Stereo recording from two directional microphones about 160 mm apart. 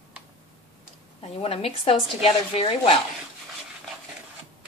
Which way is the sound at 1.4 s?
40° left (ahead or behind).